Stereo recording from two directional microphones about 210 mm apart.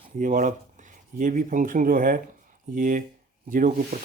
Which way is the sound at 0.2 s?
40° right (ahead or behind).